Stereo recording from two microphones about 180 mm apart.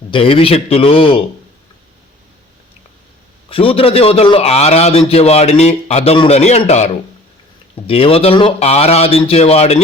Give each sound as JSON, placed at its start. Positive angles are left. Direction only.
{"t": 0.1, "sound": "a man's voice", "side_deg": 30}
{"t": 3.5, "sound": "a man's voice", "side_deg": 30}